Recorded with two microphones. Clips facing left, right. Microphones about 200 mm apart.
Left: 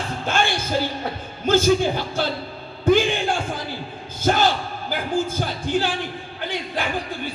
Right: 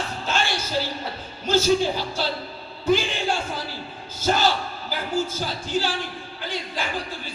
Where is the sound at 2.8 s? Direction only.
55° left (ahead or behind).